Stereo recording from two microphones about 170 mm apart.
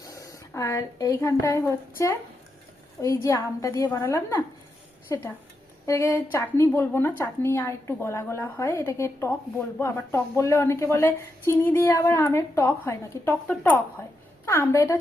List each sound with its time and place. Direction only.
0.0 s a woman's voice: 20° left (ahead or behind)